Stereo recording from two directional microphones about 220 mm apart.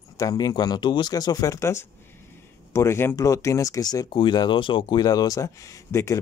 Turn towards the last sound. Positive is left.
turn(degrees=15)  # may be behind; listen again after turning